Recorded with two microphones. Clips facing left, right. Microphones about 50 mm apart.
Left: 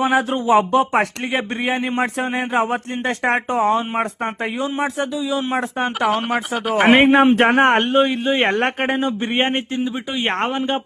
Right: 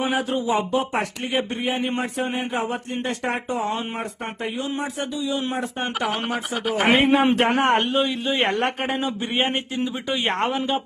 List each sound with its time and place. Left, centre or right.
0.0 s speech: left
2.0 s speech: left
6.1 s speech: centre
6.8 s speech: left